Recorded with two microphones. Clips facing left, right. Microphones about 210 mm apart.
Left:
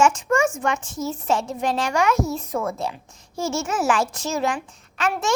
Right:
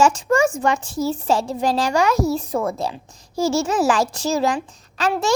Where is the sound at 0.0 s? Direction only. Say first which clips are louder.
Right 2 dB; 35° right (ahead or behind).